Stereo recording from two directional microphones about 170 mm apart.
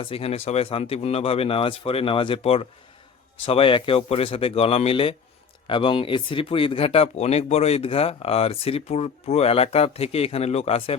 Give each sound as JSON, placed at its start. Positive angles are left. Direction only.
{"t": 0.0, "sound": "speech", "side_deg": 35}